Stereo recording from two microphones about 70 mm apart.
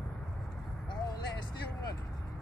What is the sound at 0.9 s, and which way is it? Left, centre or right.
Vehicle, left.